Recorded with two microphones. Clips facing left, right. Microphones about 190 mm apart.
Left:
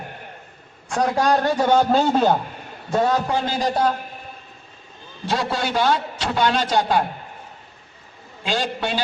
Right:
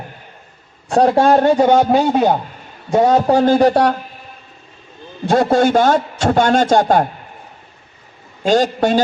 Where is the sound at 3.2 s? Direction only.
45° right (ahead or behind); by 3.9 s 65° right (ahead or behind).